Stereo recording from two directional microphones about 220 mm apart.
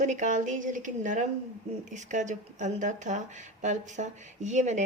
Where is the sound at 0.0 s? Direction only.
35° right (ahead or behind).